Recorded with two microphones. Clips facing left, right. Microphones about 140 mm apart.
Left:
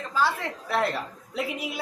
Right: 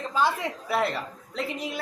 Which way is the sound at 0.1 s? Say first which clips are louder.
Even; 20° right (ahead or behind).